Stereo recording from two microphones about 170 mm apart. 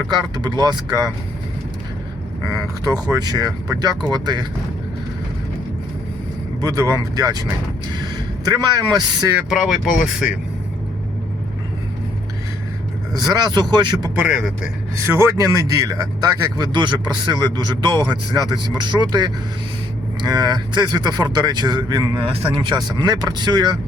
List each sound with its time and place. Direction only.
0.1 s a man's voice: 25° right (ahead or behind)
2.8 s a man's voice: 20° right (ahead or behind)
6.6 s a man's voice: 20° right (ahead or behind)
9.4 s a man's voice: 5° right (ahead or behind)
13.1 s a man's voice: 25° right (ahead or behind)
14.2 s a man's voice: 5° right (ahead or behind)
14.9 s a man's voice: 15° right (ahead or behind)
20.2 s a man's voice: 25° right (ahead or behind)